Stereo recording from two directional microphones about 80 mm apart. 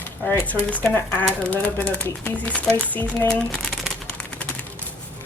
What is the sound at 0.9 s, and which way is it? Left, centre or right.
Speech, centre.